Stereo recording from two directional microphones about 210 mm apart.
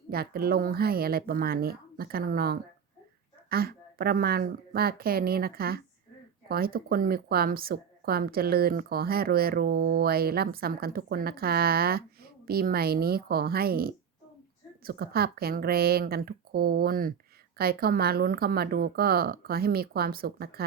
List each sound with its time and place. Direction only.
0.1 s speech: 45° right (ahead or behind)